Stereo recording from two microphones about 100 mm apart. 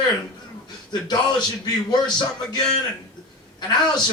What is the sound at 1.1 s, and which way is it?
A man's voice, 45° left (ahead or behind).